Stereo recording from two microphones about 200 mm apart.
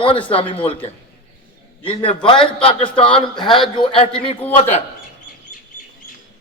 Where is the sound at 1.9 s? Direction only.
25° left (ahead or behind).